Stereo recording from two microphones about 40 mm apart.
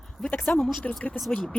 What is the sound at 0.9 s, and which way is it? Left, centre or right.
Speech, centre.